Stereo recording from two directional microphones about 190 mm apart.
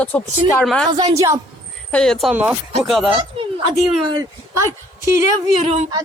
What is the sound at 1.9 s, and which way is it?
Speech, 5° left (ahead or behind).